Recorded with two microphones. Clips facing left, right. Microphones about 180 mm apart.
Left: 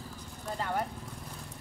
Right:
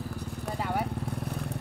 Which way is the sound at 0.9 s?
65° right (ahead or behind).